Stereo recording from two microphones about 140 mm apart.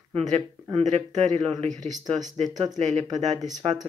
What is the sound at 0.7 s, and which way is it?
Speech, 55° right (ahead or behind).